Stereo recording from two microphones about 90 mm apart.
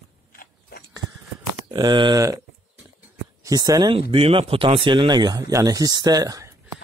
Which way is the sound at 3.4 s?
45° right (ahead or behind).